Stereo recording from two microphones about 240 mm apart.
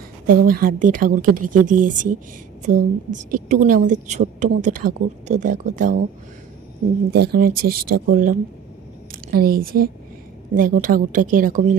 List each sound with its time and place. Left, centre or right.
0.5 s a woman's voice: right
7.1 s a woman's voice: right